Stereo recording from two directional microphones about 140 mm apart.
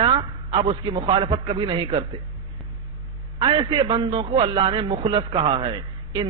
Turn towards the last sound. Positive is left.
turn(degrees=-35)  # may be behind; listen again after turning